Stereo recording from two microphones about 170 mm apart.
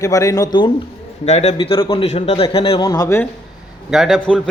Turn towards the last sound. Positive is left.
turn(degrees=5)  # may be behind; listen again after turning